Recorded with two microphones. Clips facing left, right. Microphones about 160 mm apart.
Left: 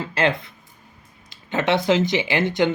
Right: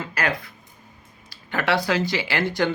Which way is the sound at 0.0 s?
25° left (ahead or behind).